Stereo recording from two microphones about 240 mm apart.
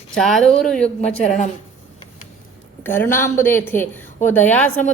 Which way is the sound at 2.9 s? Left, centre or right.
Centre.